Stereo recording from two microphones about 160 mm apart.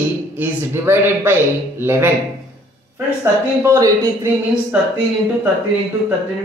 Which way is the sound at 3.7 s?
20° right (ahead or behind).